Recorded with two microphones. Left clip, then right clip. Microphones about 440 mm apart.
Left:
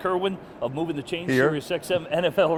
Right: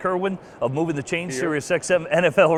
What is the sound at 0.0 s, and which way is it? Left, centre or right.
Speech, right.